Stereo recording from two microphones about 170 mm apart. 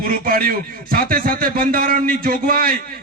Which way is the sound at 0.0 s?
55° right (ahead or behind).